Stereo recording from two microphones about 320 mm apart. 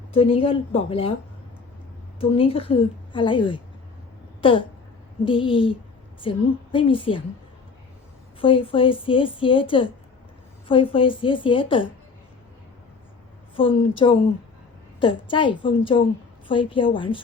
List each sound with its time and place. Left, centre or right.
0.1 s a woman's voice: centre
2.3 s a woman's voice: centre
4.4 s a sound: centre
5.2 s a woman's voice: centre
8.4 s a woman's voice: centre
13.6 s a woman's voice: centre